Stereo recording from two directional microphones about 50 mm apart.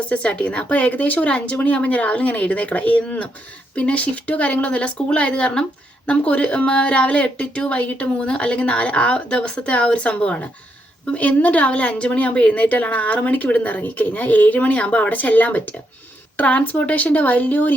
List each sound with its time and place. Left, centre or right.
0.1 s speech: left